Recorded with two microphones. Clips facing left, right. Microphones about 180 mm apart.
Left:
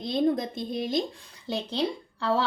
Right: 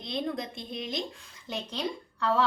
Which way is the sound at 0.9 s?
35° left (ahead or behind).